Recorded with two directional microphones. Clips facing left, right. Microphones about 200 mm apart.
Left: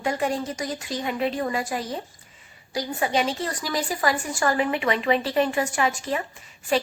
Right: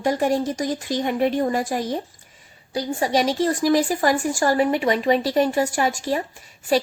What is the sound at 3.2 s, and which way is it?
Speech, 50° right (ahead or behind).